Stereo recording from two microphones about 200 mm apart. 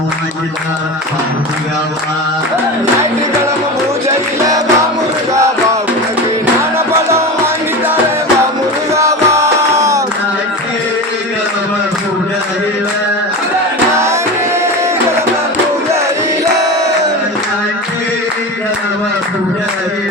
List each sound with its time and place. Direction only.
4.4 s music: 15° right (ahead or behind)
6.7 s music: 10° right (ahead or behind)
9.0 s music: 15° right (ahead or behind)
13.9 s music: 15° right (ahead or behind)